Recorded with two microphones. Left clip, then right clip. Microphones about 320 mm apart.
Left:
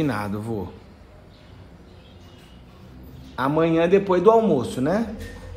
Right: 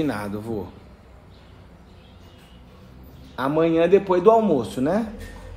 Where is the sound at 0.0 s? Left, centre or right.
Centre.